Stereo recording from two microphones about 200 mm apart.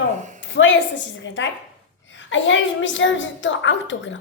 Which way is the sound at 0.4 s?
70° left (ahead or behind).